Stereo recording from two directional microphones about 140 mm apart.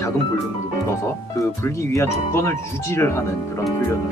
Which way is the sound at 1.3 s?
20° left (ahead or behind).